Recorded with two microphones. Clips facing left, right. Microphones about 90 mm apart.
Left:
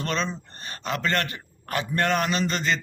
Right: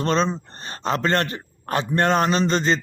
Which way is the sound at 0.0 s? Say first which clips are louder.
Right 7 dB; 30° right (ahead or behind).